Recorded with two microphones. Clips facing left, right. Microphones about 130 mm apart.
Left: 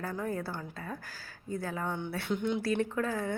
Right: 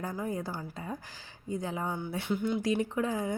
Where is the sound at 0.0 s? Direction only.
15° right (ahead or behind).